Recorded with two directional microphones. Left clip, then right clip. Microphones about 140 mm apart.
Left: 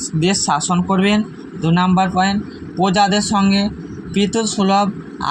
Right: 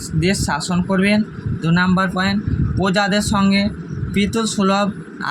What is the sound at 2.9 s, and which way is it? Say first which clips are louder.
Speech: left 2 dB; 15° left (ahead or behind).